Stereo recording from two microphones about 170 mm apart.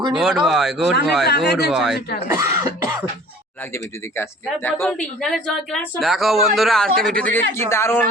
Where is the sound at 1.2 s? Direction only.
75° left (ahead or behind).